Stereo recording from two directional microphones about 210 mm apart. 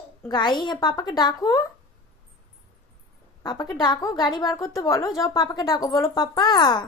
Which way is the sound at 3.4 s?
20° left (ahead or behind).